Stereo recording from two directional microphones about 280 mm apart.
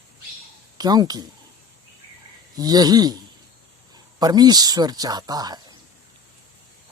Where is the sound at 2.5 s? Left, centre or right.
Centre.